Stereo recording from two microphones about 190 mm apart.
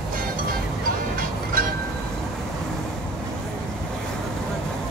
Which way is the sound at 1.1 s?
50° right (ahead or behind).